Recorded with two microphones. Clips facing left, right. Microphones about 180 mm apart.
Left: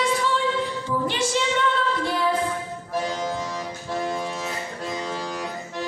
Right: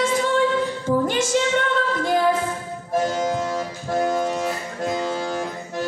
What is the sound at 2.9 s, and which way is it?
Music, 45° right (ahead or behind).